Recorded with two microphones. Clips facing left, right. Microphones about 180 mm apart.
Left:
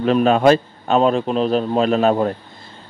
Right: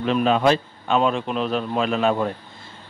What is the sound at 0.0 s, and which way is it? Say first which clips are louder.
Speech: left 5 dB; 45° left (ahead or behind).